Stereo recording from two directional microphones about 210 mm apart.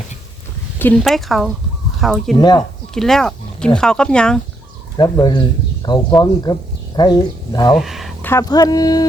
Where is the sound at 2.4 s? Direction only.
20° left (ahead or behind).